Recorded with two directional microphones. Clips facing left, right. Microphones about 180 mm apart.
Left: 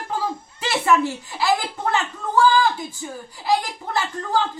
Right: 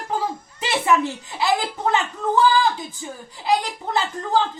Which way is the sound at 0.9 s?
20° right (ahead or behind).